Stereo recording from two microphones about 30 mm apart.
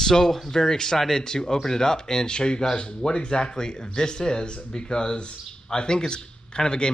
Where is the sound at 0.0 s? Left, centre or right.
Centre.